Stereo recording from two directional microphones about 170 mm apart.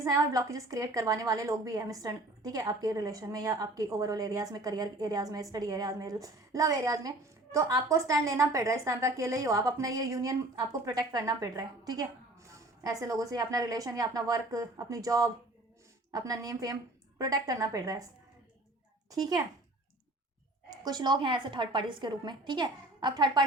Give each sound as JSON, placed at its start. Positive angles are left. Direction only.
{"t": 0.0, "sound": "a woman's voice", "side_deg": -20}
{"t": 19.1, "sound": "a woman's voice", "side_deg": -20}
{"t": 20.8, "sound": "a woman's voice", "side_deg": -25}